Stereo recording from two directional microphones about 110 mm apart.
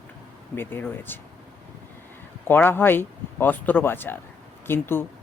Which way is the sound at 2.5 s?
20° left (ahead or behind).